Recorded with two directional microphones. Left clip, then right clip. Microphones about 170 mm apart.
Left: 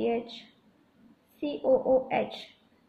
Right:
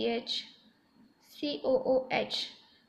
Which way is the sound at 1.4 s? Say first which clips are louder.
Left 4 dB; 25° right (ahead or behind).